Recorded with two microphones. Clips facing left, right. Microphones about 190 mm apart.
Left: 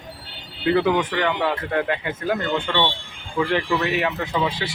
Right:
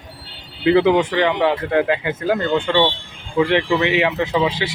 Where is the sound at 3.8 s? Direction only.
90° right.